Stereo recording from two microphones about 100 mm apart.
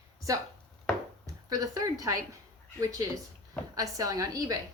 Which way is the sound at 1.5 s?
40° right (ahead or behind).